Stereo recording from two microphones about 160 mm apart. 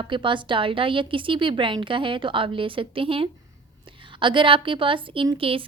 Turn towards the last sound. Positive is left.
turn(degrees=-35)  # may be behind; listen again after turning